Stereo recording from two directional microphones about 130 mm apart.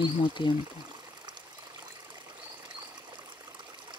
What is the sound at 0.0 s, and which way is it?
Speech, 40° left (ahead or behind).